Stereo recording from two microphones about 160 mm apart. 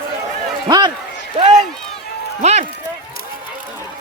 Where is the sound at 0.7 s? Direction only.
25° right (ahead or behind).